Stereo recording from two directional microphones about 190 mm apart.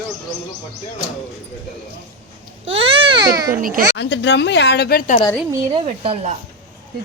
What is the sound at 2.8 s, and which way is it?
Speech, 30° right (ahead or behind).